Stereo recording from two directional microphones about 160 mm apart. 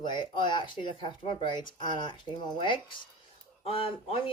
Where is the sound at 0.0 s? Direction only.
30° left (ahead or behind).